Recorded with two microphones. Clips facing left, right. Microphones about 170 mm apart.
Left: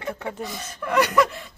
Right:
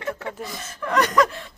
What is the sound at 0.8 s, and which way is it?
Chuckle, 5° left (ahead or behind).